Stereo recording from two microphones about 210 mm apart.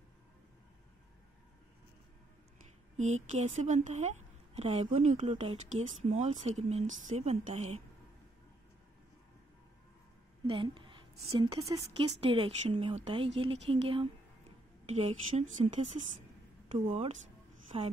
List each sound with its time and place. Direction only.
3.0 s a woman's voice: 35° right (ahead or behind)
10.4 s a woman's voice: 25° right (ahead or behind)
11.6 s speech: 15° right (ahead or behind)
16.7 s speech: 25° right (ahead or behind)